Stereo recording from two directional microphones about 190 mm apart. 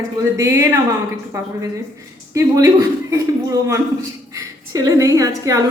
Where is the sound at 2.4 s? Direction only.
15° right (ahead or behind).